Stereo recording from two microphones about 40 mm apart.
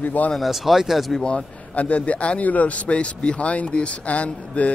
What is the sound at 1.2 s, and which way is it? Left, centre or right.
Speech, left.